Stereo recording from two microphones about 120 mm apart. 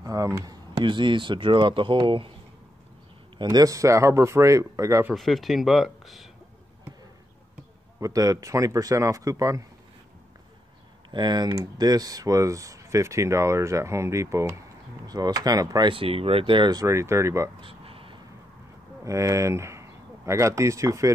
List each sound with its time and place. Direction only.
0.0 s speech: 30° right (ahead or behind)
0.7 s speech: 40° right (ahead or behind)
3.4 s speech: 30° right (ahead or behind)
5.1 s speech: centre (ahead or behind)
8.0 s speech: 30° right (ahead or behind)
11.1 s speech: 40° right (ahead or behind)
15.9 s speech: 50° right (ahead or behind)
16.8 s speech: 25° right (ahead or behind)
17.6 s a sound: 50° right (ahead or behind)
19.0 s speech: 25° right (ahead or behind)